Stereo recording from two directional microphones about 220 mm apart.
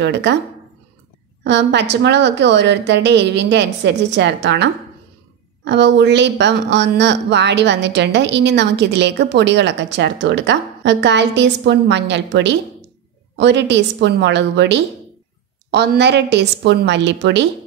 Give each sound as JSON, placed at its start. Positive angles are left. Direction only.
{"t": 0.0, "sound": "a woman's voice", "side_deg": -50}
{"t": 1.4, "sound": "a woman's voice", "side_deg": -50}
{"t": 5.7, "sound": "a woman's voice", "side_deg": -55}